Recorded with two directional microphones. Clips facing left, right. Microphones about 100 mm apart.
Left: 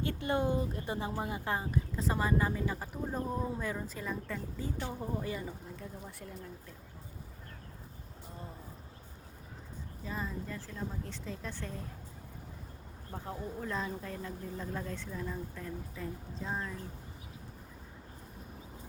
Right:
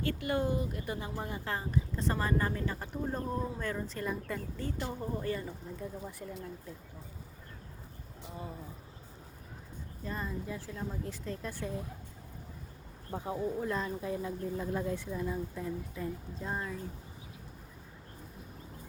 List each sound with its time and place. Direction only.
0.0 s speech: 20° left (ahead or behind)
1.7 s speech: 5° left (ahead or behind)
4.6 s speech: 10° left (ahead or behind)
5.8 s speech: centre (ahead or behind)
10.0 s speech: centre (ahead or behind)
13.1 s speech: 15° right (ahead or behind)